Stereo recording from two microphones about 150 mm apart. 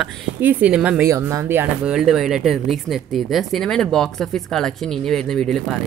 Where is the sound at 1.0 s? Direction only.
20° right (ahead or behind).